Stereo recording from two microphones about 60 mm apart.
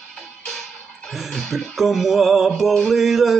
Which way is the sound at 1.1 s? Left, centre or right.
Centre.